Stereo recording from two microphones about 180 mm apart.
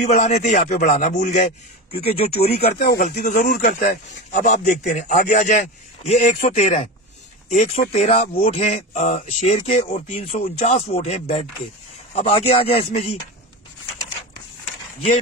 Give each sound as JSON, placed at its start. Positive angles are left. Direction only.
{"t": 0.0, "sound": "a man's voice", "side_deg": 40}
{"t": 3.0, "sound": "a man's voice", "side_deg": 50}